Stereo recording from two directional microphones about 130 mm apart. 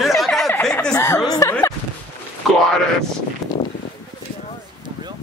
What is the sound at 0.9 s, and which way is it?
Chuckle, 20° left (ahead or behind).